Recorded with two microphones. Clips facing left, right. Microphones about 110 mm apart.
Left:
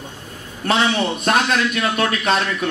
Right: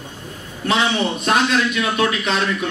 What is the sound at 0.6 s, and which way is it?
A man's voice, 50° left (ahead or behind).